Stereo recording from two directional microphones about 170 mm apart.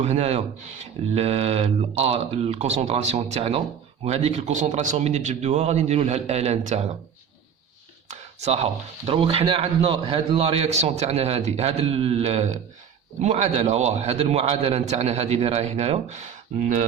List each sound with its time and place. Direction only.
0.0 s speech: 40° right (ahead or behind)
8.0 s speech: 40° right (ahead or behind)